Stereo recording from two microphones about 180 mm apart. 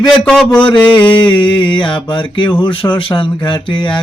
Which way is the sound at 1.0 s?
25° left (ahead or behind).